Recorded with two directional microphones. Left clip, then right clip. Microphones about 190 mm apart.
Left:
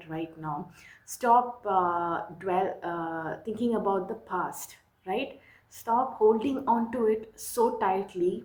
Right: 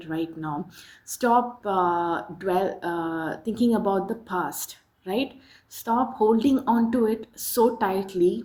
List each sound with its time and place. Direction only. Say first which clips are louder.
0.1 s speech: right 5 dB; 50° right (ahead or behind)